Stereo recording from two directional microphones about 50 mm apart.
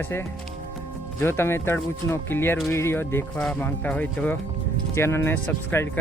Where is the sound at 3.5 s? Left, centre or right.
Left.